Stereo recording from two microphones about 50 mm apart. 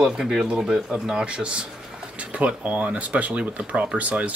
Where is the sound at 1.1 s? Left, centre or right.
Centre.